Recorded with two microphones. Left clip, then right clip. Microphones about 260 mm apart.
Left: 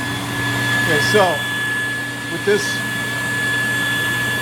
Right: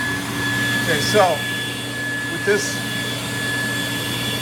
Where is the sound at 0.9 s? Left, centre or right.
Left.